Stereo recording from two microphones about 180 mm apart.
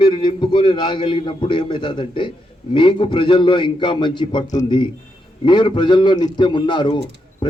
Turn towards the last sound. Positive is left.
turn(degrees=25)  # may be behind; listen again after turning